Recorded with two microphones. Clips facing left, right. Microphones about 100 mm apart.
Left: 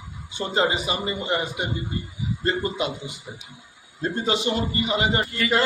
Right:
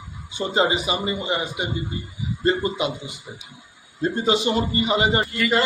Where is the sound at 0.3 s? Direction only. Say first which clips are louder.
Right 2 dB; 15° right (ahead or behind).